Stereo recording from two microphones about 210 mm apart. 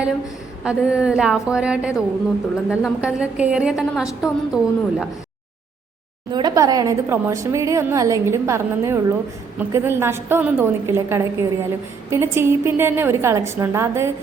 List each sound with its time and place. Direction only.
0.6 s a woman's voice: 5° right (ahead or behind)
6.3 s a woman's voice: 20° right (ahead or behind)